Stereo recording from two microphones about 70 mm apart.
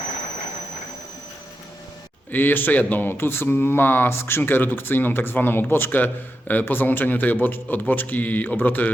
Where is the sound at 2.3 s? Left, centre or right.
Left.